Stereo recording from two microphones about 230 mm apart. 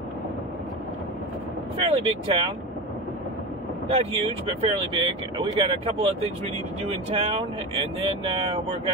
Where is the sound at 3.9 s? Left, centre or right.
Right.